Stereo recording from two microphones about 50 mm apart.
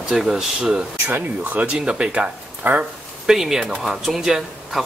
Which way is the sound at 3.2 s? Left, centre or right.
Centre.